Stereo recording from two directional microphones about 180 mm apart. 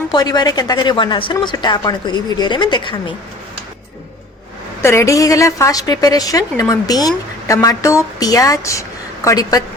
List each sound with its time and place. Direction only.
0.1 s speech: 20° left (ahead or behind)
4.8 s a woman's voice: 15° left (ahead or behind)